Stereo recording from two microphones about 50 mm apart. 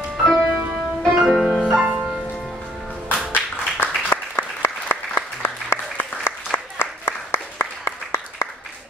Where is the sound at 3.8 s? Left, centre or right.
Left.